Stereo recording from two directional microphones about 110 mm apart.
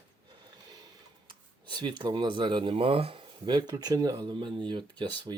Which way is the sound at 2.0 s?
45° right (ahead or behind).